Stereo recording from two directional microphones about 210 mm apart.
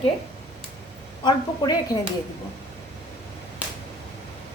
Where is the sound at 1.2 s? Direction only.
20° left (ahead or behind).